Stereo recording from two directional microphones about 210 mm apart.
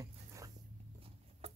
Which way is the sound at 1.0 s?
30° right (ahead or behind).